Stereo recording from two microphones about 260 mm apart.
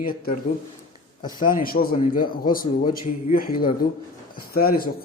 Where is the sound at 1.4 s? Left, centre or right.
Left.